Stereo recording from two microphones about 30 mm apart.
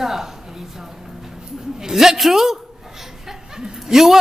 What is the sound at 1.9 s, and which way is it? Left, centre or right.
Speech, centre.